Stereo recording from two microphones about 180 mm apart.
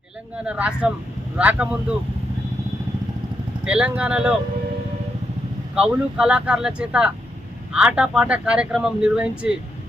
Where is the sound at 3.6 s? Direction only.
5° right (ahead or behind).